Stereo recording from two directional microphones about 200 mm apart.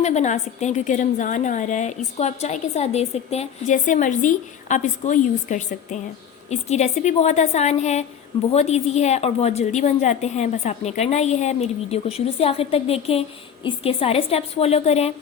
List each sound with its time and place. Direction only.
0.0 s a woman's voice: 35° left (ahead or behind)